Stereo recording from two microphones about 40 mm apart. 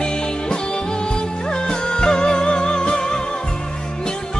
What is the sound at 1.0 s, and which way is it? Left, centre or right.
Music of bollywood, left.